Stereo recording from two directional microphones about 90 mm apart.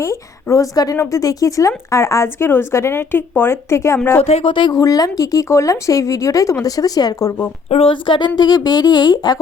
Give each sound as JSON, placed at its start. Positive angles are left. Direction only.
{"t": 0.0, "sound": "speech", "side_deg": 35}
{"t": 4.2, "sound": "speech", "side_deg": 80}
{"t": 4.7, "sound": "speech", "side_deg": 40}
{"t": 7.8, "sound": "speech", "side_deg": 75}
{"t": 8.4, "sound": "speech", "side_deg": 50}